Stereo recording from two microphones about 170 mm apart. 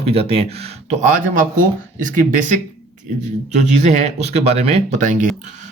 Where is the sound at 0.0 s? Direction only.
35° right (ahead or behind).